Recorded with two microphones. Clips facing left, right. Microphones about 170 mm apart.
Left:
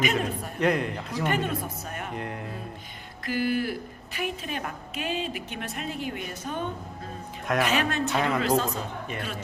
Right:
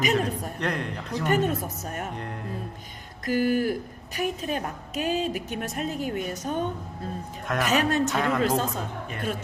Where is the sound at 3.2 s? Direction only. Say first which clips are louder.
Right 4 dB; 45° right (ahead or behind).